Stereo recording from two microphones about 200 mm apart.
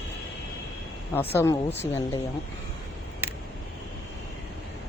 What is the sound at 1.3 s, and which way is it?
Speech, 15° left (ahead or behind).